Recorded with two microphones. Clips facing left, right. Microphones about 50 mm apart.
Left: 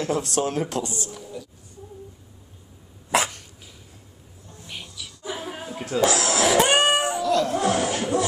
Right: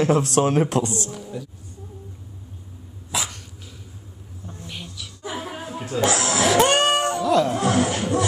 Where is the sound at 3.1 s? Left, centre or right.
Left.